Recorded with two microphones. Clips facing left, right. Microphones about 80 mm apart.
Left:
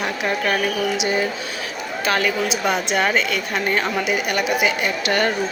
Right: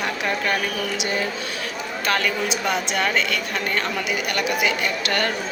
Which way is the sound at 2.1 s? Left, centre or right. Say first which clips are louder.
Left 2 dB; centre.